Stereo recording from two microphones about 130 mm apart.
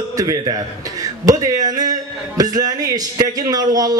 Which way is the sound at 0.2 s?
30° right (ahead or behind).